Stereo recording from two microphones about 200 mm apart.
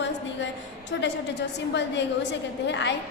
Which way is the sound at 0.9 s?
60° left (ahead or behind).